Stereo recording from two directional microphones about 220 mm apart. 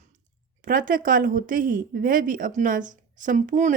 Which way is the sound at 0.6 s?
40° right (ahead or behind).